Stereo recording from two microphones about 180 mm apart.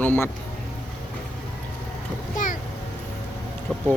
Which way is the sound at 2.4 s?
45° left (ahead or behind).